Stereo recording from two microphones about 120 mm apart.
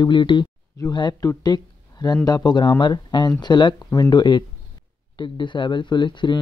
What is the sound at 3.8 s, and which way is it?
Speech, 25° left (ahead or behind).